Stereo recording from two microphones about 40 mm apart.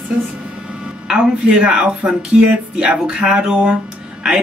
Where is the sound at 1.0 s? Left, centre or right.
Right.